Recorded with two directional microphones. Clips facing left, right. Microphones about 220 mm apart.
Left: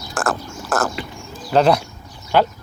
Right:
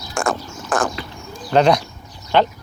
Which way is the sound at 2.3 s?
5° left (ahead or behind).